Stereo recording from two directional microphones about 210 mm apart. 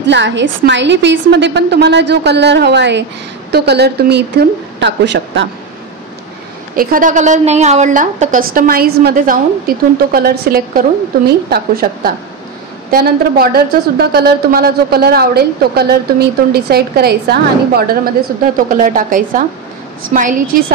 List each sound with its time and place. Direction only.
0.0 s a woman's voice: 55° right (ahead or behind)
6.7 s a woman's voice: 40° right (ahead or behind)
18.7 s a woman's voice: 40° right (ahead or behind)